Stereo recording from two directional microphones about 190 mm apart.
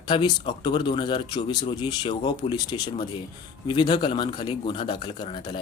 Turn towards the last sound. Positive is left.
turn(degrees=25)  # may be behind; listen again after turning